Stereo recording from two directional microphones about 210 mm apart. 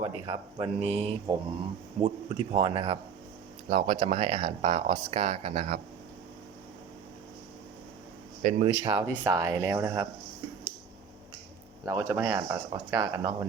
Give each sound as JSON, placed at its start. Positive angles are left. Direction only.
{"t": 0.0, "sound": "speech", "side_deg": -25}
{"t": 8.4, "sound": "speech", "side_deg": -40}
{"t": 8.6, "sound": "speech", "side_deg": -20}
{"t": 11.9, "sound": "speech", "side_deg": -15}